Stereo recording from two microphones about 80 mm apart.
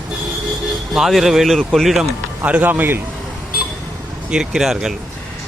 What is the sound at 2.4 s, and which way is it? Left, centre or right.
Speech, centre.